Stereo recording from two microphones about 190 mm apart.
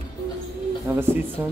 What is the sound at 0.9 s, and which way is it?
Speech, 10° right (ahead or behind).